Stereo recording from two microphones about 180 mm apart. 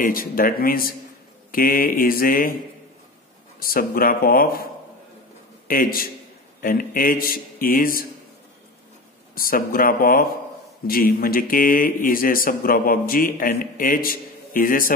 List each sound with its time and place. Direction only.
0.0 s speech: 50° left (ahead or behind)
3.5 s speech: 55° left (ahead or behind)
5.7 s speech: 55° left (ahead or behind)
9.3 s speech: 55° left (ahead or behind)